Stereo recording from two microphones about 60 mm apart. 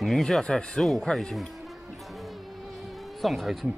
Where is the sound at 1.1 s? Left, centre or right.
Centre.